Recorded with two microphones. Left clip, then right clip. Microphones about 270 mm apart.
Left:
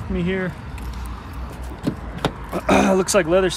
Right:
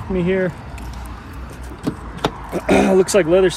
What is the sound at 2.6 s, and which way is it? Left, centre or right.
Speech, left.